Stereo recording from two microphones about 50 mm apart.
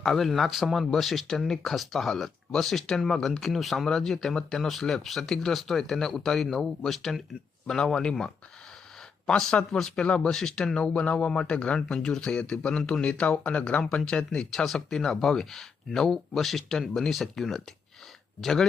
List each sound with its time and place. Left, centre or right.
0.0 s speech: centre
9.2 s speech: centre
14.3 s speech: centre